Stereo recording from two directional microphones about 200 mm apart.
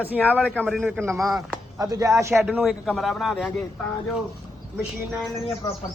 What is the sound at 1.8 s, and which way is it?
Speech, 15° right (ahead or behind).